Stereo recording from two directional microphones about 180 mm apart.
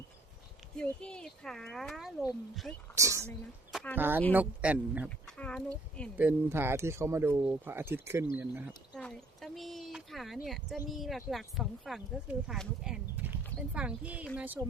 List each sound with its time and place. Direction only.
0.8 s speech: 5° left (ahead or behind)
2.9 s speech: 15° right (ahead or behind)
5.0 s speech: 5° left (ahead or behind)
6.1 s speech: 10° right (ahead or behind)
9.0 s speech: 5° left (ahead or behind)